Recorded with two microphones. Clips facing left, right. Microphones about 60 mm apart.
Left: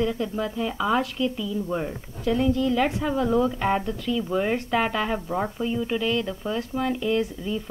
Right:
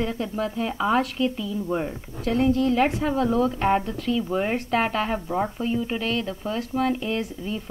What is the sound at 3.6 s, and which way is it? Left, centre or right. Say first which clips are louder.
Speech: right 2 dB; right.